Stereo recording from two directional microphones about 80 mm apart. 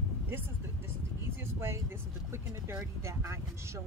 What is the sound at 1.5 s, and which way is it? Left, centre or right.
Speech, right.